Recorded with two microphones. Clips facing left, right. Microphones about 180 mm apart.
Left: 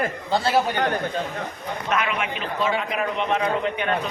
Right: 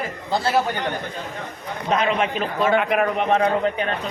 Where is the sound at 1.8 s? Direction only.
30° right (ahead or behind).